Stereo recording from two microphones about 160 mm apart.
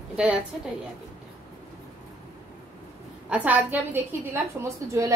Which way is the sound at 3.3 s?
10° right (ahead or behind).